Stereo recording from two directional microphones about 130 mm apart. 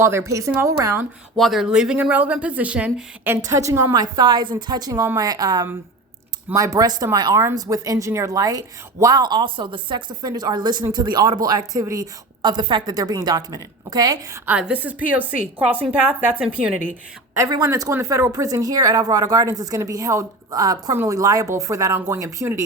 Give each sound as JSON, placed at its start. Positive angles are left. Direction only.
{"t": 0.0, "sound": "speech", "side_deg": -20}
{"t": 1.4, "sound": "speech", "side_deg": 0}
{"t": 3.4, "sound": "a woman's voice", "side_deg": -25}
{"t": 14.4, "sound": "speech", "side_deg": -10}
{"t": 17.5, "sound": "speech", "side_deg": -30}